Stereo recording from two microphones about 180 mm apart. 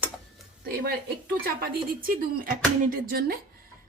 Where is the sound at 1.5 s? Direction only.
55° right (ahead or behind).